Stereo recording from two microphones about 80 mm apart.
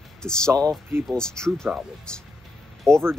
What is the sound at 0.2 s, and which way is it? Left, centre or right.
Speech, centre.